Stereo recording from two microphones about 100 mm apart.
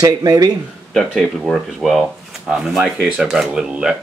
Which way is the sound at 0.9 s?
Centre (ahead or behind).